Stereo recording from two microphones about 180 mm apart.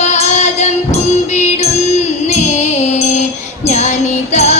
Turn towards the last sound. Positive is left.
turn(degrees=40)  # may be behind; listen again after turning